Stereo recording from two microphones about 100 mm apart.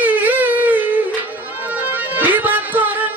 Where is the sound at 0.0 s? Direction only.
15° right (ahead or behind).